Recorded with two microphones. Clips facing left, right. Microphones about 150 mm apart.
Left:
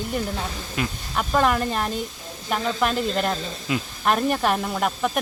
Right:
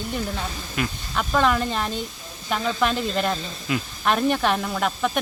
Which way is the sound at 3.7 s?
25° left (ahead or behind).